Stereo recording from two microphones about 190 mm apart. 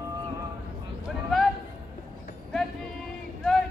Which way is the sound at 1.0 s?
Centre (ahead or behind).